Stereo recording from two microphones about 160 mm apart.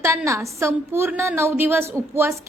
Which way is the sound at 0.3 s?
15° right (ahead or behind).